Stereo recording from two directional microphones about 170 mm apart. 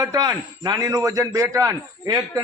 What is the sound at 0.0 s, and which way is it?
A man's voice, 20° right (ahead or behind).